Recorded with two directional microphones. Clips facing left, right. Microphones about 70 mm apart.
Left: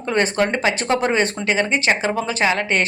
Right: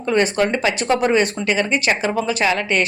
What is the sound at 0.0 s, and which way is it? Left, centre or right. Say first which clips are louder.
Speech: right 1 dB; left.